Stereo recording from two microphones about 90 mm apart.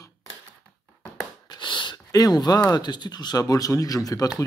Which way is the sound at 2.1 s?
45° left (ahead or behind).